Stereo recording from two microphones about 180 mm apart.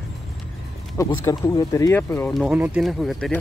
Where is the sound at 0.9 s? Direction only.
15° left (ahead or behind).